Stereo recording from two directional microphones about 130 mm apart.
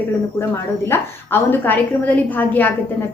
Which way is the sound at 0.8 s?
15° left (ahead or behind).